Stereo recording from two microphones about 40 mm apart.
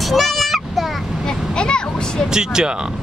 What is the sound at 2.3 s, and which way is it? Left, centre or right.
Speech, centre.